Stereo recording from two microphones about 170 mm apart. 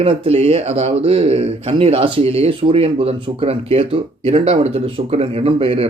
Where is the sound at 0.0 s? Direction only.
35° right (ahead or behind).